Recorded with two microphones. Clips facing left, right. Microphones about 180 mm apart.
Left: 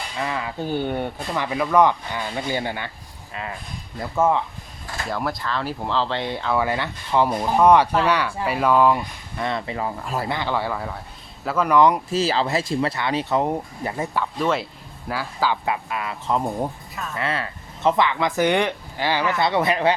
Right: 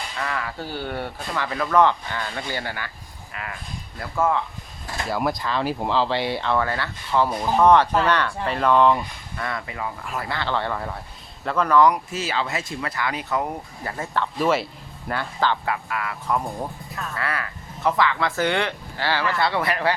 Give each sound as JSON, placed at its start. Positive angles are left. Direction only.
{"t": 0.2, "sound": "speech", "side_deg": 20}
{"t": 3.9, "sound": "speech", "side_deg": 20}
{"t": 5.0, "sound": "speech", "side_deg": -10}
{"t": 6.7, "sound": "speech", "side_deg": 15}
{"t": 9.4, "sound": "speech", "side_deg": 25}
{"t": 10.2, "sound": "speech", "side_deg": 15}
{"t": 11.8, "sound": "speech", "side_deg": 30}
{"t": 14.3, "sound": "speech", "side_deg": -5}
{"t": 15.6, "sound": "speech", "side_deg": 20}